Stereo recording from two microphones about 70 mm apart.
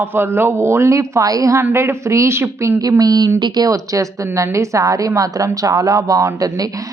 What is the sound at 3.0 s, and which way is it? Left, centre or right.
Speech, right.